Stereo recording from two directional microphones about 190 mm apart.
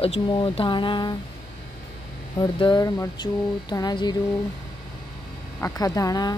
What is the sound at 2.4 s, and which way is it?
Speech, 20° left (ahead or behind).